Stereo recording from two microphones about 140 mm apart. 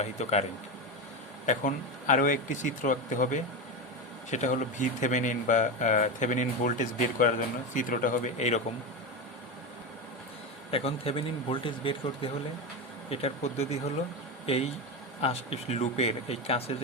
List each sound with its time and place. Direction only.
0.0 s speech: 50° left (ahead or behind)
1.5 s speech: 65° left (ahead or behind)
10.7 s speech: 45° left (ahead or behind)
13.1 s speech: 50° left (ahead or behind)